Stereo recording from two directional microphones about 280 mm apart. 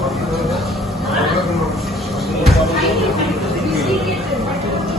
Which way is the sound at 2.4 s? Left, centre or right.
Centre.